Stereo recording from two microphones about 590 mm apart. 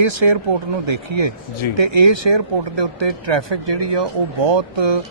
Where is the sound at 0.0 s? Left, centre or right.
Right.